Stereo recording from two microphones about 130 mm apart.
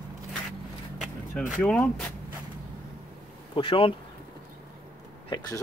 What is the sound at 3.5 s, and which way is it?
Speech, 40° left (ahead or behind).